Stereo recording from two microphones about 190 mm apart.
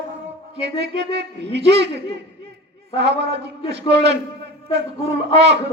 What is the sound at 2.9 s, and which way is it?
A man's voice, 60° right (ahead or behind).